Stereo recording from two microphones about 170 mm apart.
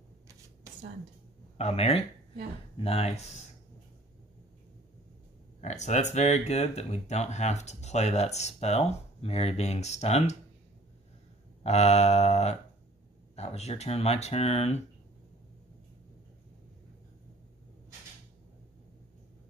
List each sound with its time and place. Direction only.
0.7 s a sound: 20° right (ahead or behind)
1.6 s speech: 40° left (ahead or behind)
5.6 s speech: 45° left (ahead or behind)
11.6 s speech: 40° left (ahead or behind)